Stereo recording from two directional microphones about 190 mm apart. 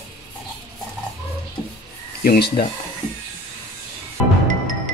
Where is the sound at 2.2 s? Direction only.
50° left (ahead or behind).